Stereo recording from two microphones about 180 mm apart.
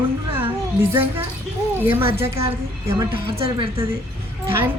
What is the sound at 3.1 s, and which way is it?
Speech, 30° right (ahead or behind).